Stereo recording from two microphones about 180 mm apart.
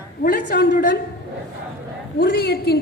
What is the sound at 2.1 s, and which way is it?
Speech, 60° left (ahead or behind).